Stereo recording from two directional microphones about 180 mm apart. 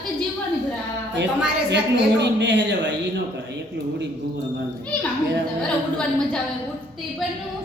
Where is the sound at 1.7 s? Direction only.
75° right (ahead or behind).